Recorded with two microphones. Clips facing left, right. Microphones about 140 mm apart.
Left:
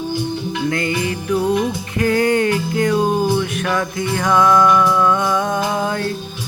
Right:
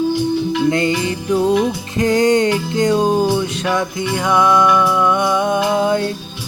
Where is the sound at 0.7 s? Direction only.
25° right (ahead or behind).